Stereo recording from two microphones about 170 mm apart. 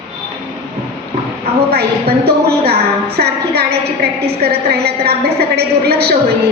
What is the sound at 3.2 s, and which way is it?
A woman's voice, 70° right (ahead or behind).